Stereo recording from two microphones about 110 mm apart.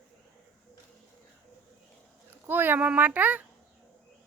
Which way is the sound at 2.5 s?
20° right (ahead or behind).